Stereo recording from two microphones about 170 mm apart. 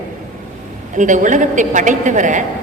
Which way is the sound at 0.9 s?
50° right (ahead or behind).